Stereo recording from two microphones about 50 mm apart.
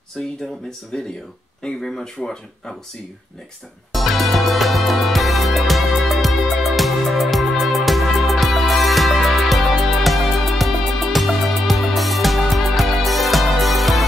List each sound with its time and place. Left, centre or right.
0.2 s speech: centre
3.9 s music: centre